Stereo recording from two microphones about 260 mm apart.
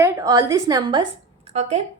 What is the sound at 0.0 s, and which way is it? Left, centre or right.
A woman's voice, centre.